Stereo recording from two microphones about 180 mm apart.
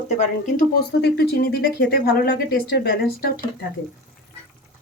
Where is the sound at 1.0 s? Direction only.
65° left (ahead or behind).